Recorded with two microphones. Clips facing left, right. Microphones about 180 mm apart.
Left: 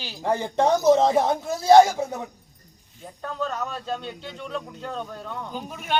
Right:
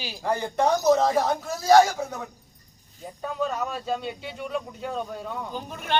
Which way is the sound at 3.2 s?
10° right (ahead or behind).